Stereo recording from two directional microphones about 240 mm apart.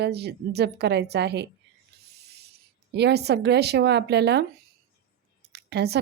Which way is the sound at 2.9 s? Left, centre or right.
Right.